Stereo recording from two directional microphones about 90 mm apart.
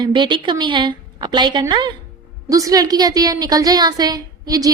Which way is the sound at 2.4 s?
40° right (ahead or behind).